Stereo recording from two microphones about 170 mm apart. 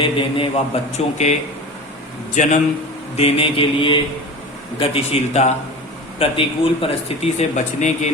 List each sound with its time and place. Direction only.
0.0 s a man's voice: 30° left (ahead or behind)
3.2 s a man's voice: 35° left (ahead or behind)